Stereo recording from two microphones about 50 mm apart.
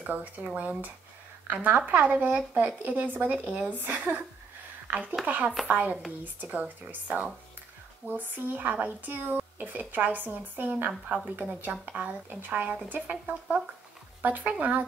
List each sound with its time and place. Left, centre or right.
0.1 s speech: right
10.9 s a woman's voice: centre
11.6 s speech: right